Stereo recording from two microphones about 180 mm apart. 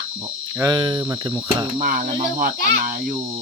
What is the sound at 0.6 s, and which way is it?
Cricket, 25° right (ahead or behind).